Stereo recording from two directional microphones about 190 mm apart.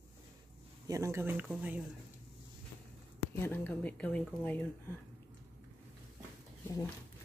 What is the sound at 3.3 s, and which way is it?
A woman's voice, 10° left (ahead or behind).